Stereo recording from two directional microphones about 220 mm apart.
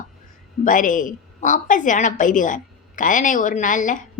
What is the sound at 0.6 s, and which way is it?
A woman's voice, 35° left (ahead or behind).